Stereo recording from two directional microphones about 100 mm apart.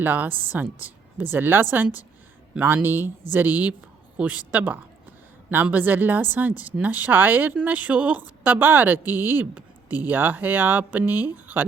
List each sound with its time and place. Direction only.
0.0 s a woman's voice: 20° right (ahead or behind)